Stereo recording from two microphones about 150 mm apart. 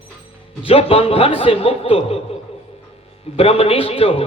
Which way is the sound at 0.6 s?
40° left (ahead or behind).